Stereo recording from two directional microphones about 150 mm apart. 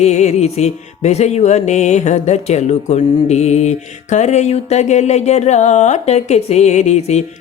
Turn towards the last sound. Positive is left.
turn(degrees=50)  # may be behind; listen again after turning